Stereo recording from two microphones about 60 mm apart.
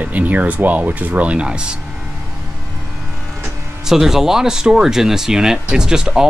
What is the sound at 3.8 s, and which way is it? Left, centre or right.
Speech, centre.